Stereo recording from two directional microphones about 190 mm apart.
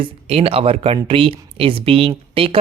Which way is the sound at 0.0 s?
30° right (ahead or behind).